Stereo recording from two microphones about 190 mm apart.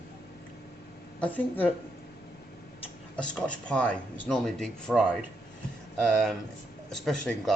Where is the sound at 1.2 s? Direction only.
5° left (ahead or behind).